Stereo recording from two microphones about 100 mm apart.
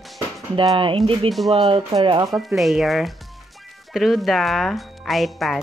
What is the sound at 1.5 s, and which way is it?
Speech, 65° right (ahead or behind).